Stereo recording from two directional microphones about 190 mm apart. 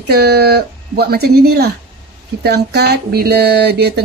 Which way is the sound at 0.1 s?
55° right (ahead or behind).